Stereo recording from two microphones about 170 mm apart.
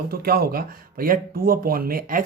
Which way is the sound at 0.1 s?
65° right (ahead or behind).